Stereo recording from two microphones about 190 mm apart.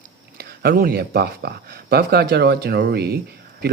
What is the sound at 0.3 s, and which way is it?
Speech, 55° right (ahead or behind).